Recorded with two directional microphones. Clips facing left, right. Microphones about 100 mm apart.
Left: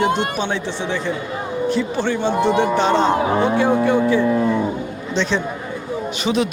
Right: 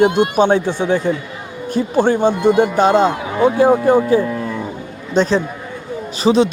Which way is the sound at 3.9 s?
40° right (ahead or behind).